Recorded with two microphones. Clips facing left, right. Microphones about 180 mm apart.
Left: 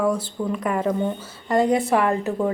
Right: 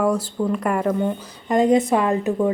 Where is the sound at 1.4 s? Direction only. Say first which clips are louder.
Right 3 dB; 20° right (ahead or behind).